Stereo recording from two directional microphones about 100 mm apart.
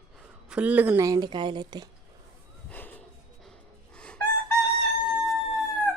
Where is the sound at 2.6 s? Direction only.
15° left (ahead or behind).